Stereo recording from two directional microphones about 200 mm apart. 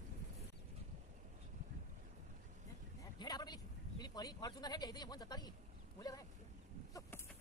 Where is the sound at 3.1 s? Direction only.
20° left (ahead or behind).